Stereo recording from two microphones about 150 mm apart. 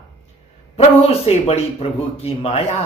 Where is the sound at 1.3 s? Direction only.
45° left (ahead or behind).